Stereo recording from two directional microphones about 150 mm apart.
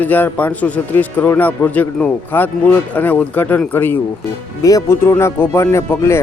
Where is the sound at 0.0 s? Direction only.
10° left (ahead or behind).